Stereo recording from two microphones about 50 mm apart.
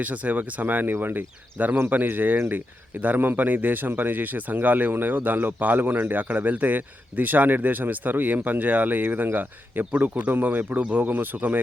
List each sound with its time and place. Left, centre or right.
0.0 s speech: right